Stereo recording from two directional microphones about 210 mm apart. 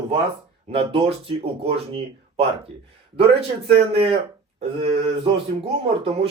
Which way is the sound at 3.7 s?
30° right (ahead or behind).